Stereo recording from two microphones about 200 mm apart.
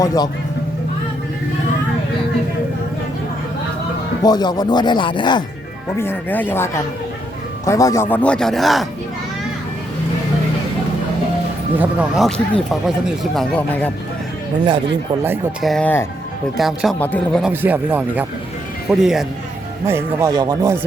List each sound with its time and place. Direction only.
0.0 s speech: 15° left (ahead or behind)
4.2 s speech: 20° left (ahead or behind)
6.0 s speech: 10° left (ahead or behind)
11.8 s speech: 5° right (ahead or behind)
15.6 s speech: 5° left (ahead or behind)
17.4 s speech: 10° right (ahead or behind)
19.9 s speech: 15° right (ahead or behind)